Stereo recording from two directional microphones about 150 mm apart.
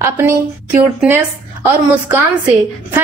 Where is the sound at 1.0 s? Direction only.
5° right (ahead or behind).